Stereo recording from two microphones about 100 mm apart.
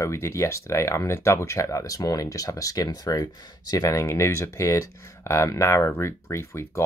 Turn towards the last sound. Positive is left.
turn(degrees=30)  # may be behind; listen again after turning